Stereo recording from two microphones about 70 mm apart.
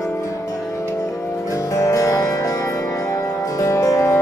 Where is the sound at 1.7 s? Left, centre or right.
Left.